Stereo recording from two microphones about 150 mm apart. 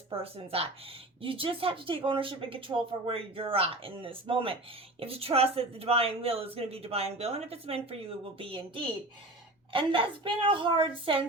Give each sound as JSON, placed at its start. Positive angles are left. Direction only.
{"t": 0.1, "sound": "speech", "side_deg": -40}